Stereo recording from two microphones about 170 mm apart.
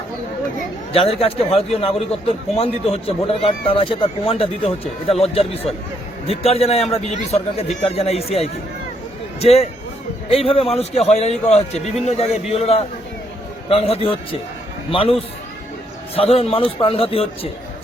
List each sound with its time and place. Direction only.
0.9 s a man's voice: 35° left (ahead or behind)
16.1 s a man's voice: 35° left (ahead or behind)